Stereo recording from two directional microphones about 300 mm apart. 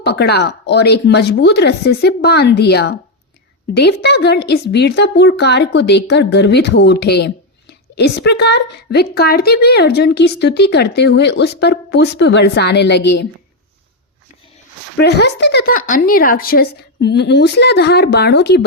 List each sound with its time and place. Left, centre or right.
0.0 s a woman's voice: left
14.9 s a woman's voice: left